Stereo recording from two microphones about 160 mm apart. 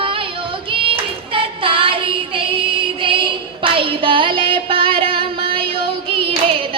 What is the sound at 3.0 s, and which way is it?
Female singing, 35° right (ahead or behind).